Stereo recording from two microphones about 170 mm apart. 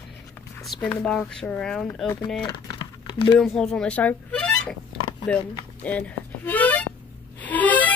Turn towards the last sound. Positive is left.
turn(degrees=10)  # may be behind; listen again after turning